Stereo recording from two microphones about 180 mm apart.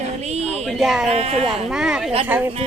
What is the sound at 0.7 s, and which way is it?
Speech, centre (ahead or behind).